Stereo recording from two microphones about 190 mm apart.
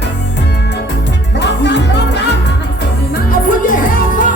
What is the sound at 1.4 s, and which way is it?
Music, 65° left (ahead or behind).